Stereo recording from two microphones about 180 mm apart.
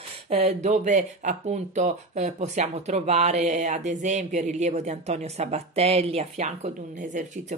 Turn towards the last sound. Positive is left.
turn(degrees=-40)  # may be behind; listen again after turning